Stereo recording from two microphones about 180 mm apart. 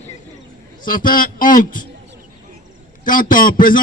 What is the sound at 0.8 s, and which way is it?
Speech, 50° left (ahead or behind).